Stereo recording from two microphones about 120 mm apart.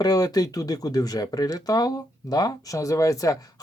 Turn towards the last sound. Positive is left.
turn(degrees=30)  # may be behind; listen again after turning